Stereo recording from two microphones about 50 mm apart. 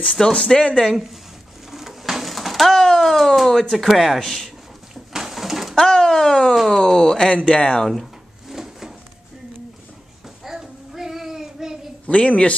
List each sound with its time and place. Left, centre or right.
0.2 s speech: centre
1.7 s pigeon: centre
2.8 s speech: centre
5.1 s bird: centre
5.8 s a sound: centre
6.7 s speech: centre
7.9 s drawer open or close: centre
10.4 s child singing: centre
12.1 s speech: left